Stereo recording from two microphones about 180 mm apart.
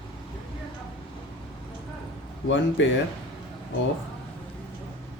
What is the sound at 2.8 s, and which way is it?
Speech, 90° left.